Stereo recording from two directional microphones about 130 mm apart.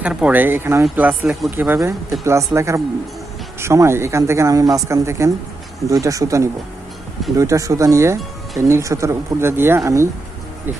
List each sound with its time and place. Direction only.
0.0 s speech: 10° right (ahead or behind)